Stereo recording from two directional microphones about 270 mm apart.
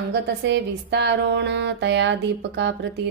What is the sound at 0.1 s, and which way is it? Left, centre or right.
Speech, right.